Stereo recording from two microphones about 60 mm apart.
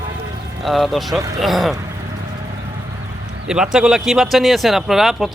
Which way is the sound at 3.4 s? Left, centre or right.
Centre.